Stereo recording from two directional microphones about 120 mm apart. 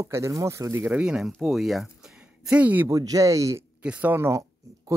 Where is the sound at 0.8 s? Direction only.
10° right (ahead or behind).